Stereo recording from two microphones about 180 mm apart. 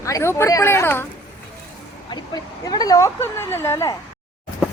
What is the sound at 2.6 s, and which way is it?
A woman's voice, 20° left (ahead or behind).